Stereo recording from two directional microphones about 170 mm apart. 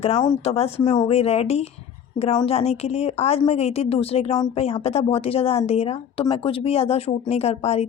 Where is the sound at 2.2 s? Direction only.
25° left (ahead or behind).